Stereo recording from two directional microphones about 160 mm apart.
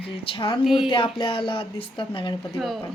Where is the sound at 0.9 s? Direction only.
30° left (ahead or behind).